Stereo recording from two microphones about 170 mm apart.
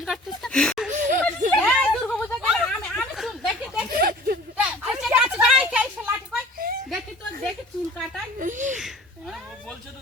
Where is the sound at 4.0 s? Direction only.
60° right (ahead or behind).